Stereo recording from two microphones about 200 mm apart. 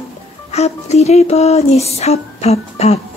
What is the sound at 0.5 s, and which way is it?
Speech, 35° left (ahead or behind).